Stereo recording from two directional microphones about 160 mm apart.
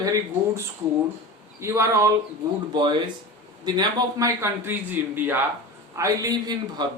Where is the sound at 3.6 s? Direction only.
25° right (ahead or behind).